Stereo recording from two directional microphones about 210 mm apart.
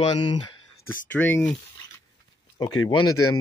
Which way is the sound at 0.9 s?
10° left (ahead or behind).